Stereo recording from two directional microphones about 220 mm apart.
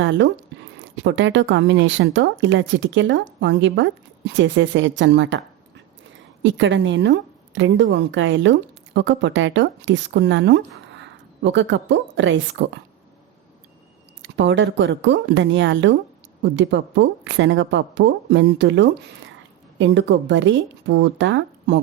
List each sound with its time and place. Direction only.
0.0 s speech: 55° right (ahead or behind)
6.4 s speech: 55° right (ahead or behind)
14.2 s a woman's voice: 55° right (ahead or behind)